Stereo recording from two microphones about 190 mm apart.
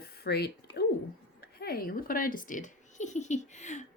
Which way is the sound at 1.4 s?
55° left (ahead or behind).